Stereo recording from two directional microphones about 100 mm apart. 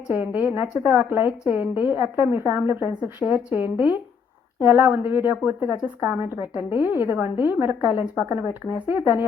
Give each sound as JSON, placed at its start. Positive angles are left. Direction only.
{"t": 0.1, "sound": "a woman's voice", "side_deg": -15}